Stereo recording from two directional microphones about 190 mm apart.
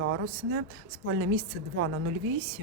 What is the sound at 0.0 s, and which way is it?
Speech, 90° right.